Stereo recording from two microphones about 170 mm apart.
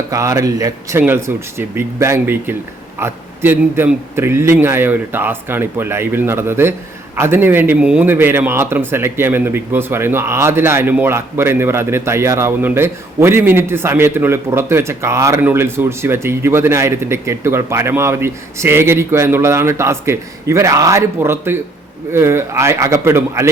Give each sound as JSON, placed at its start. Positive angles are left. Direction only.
{"t": 0.1, "sound": "a man's voice", "side_deg": -20}